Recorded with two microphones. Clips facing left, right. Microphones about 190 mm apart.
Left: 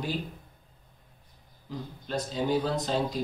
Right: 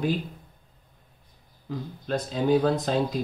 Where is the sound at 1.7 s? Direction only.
55° right (ahead or behind).